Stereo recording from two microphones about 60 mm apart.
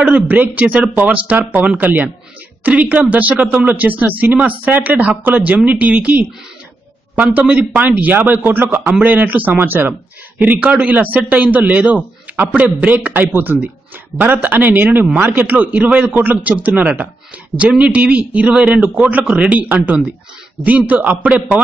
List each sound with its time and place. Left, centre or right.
0.0 s speech: right
7.3 s speech: right